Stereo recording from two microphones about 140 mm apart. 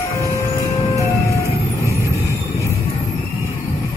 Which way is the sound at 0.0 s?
20° left (ahead or behind).